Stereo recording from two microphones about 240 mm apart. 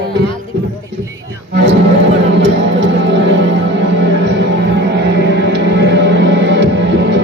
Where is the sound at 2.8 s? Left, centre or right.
Right.